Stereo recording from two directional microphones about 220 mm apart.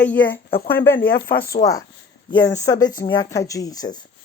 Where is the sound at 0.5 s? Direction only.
45° left (ahead or behind).